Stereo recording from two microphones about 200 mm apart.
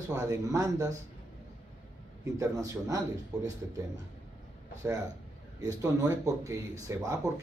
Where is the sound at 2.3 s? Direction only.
15° right (ahead or behind).